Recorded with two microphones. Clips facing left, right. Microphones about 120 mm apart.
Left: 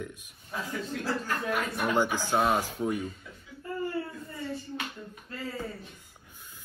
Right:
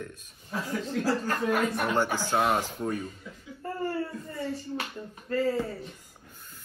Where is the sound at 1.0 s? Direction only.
40° right (ahead or behind).